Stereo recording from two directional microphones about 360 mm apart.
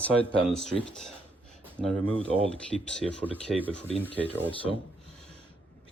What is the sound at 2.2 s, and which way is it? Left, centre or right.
Speech, centre.